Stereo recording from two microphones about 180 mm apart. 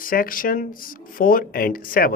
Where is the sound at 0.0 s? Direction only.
50° left (ahead or behind).